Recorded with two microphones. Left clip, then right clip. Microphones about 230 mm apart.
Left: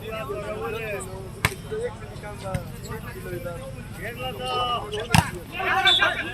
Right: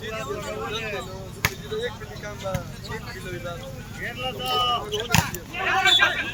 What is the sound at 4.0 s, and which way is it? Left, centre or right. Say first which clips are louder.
Speech: right 2 dB; right.